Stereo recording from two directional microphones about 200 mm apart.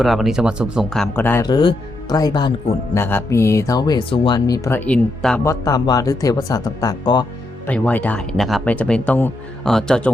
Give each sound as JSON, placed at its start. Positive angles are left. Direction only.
{"t": 0.0, "sound": "speech", "side_deg": 0}
{"t": 1.5, "sound": "speech", "side_deg": 20}
{"t": 5.4, "sound": "speech", "side_deg": 15}
{"t": 7.7, "sound": "speech", "side_deg": 10}